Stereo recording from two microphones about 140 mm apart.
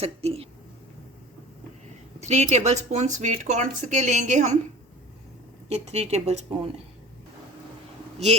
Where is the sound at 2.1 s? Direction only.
55° right (ahead or behind).